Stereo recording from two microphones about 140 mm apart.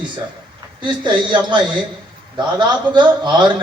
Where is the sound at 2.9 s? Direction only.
30° right (ahead or behind).